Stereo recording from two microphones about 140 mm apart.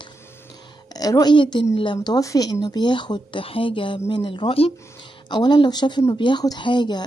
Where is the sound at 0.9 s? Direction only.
25° left (ahead or behind).